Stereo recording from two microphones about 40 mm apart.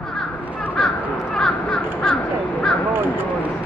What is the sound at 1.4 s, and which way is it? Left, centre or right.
Crow, centre.